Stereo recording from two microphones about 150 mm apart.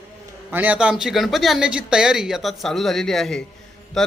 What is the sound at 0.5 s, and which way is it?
Speech, 10° right (ahead or behind).